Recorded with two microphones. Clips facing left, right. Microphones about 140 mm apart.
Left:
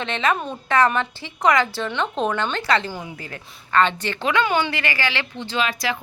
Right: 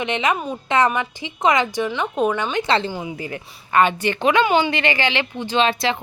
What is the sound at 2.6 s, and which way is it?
Speech, 30° right (ahead or behind).